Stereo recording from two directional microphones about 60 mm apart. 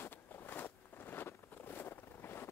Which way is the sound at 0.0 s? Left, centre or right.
Left.